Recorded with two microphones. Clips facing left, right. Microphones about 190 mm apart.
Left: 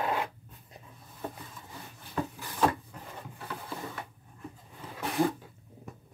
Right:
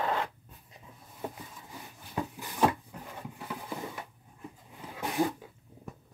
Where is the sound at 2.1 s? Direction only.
15° right (ahead or behind).